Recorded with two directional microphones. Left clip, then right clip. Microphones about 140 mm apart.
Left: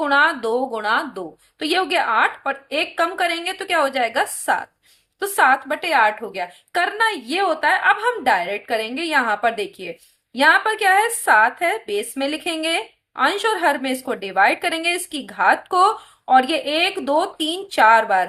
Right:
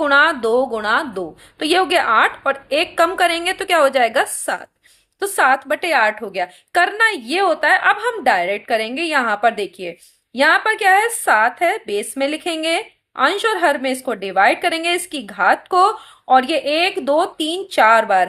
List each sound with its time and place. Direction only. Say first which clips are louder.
0.0 s a woman's voice: right 3 dB; 40° right (ahead or behind)